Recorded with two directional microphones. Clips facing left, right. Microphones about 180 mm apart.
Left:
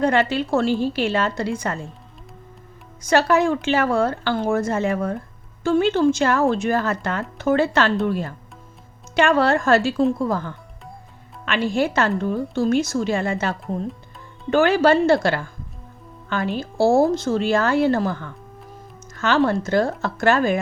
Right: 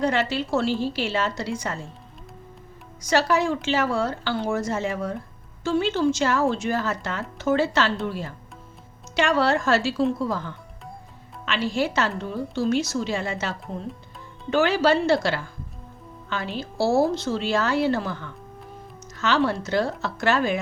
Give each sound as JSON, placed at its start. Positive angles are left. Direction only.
{"t": 0.0, "sound": "speech", "side_deg": 55}
{"t": 3.0, "sound": "a woman's voice", "side_deg": 55}